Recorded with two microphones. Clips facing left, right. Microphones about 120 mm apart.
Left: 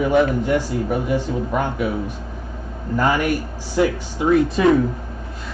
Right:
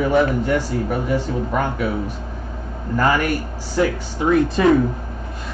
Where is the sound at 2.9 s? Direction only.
15° left (ahead or behind).